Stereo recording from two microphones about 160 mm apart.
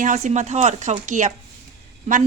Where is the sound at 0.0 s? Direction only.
50° right (ahead or behind).